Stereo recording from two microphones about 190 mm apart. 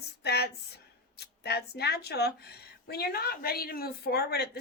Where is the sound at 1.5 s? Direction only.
60° left (ahead or behind).